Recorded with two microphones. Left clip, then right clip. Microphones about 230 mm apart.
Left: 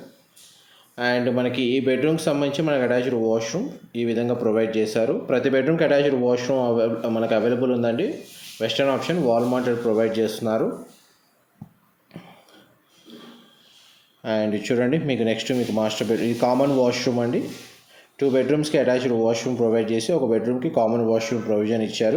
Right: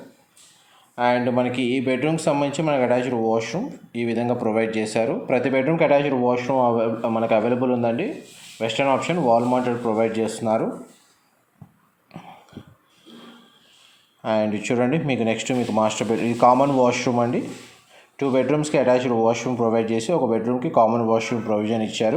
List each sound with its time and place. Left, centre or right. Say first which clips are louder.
0.9 s speech: right 2 dB; centre
14.2 s speech: right 2 dB; centre